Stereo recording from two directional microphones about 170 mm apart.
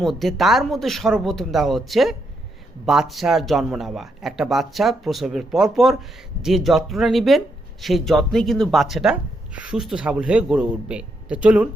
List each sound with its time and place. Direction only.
0.0 s a man's voice: centre (ahead or behind)